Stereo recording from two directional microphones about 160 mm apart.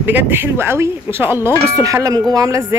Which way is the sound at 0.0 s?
15° right (ahead or behind).